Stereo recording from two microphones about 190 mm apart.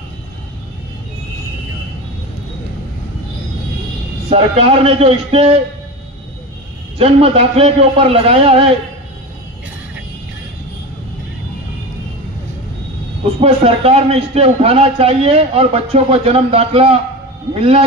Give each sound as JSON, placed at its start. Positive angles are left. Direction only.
{"t": 4.3, "sound": "a man's voice", "side_deg": -30}
{"t": 7.0, "sound": "a man's voice", "side_deg": -30}
{"t": 13.4, "sound": "a man's voice", "side_deg": -30}